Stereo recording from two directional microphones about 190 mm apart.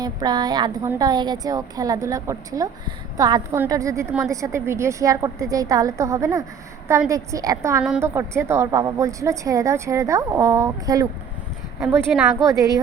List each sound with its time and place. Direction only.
0.0 s a woman's voice: 20° right (ahead or behind)